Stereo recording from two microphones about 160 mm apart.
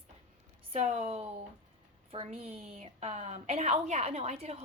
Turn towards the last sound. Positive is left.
turn(degrees=-40)  # may be behind; listen again after turning